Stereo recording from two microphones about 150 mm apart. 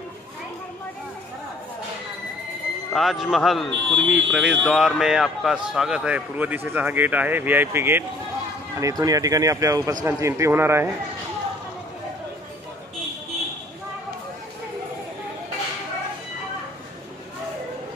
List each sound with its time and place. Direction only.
2.9 s a man's voice: centre (ahead or behind)